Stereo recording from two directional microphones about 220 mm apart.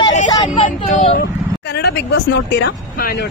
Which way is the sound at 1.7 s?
50° left (ahead or behind).